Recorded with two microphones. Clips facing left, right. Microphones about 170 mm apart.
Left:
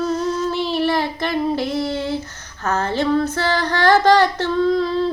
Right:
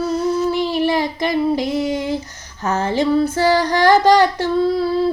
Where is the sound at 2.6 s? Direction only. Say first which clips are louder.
Right 2 dB; 15° right (ahead or behind).